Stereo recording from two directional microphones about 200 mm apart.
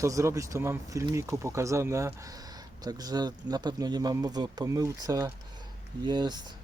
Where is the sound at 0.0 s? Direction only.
15° right (ahead or behind).